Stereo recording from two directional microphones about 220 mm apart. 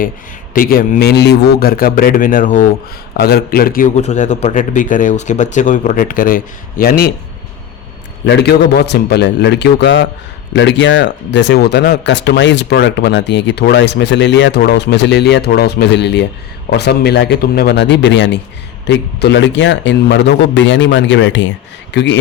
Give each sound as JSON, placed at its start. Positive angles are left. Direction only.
{"t": 0.5, "sound": "a man's voice", "side_deg": 40}
{"t": 8.2, "sound": "a man's voice", "side_deg": 50}